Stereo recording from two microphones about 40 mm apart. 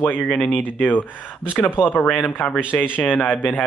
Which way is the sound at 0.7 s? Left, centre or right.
Left.